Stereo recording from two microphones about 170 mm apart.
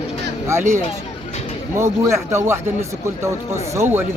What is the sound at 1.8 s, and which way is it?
Speech, 15° right (ahead or behind).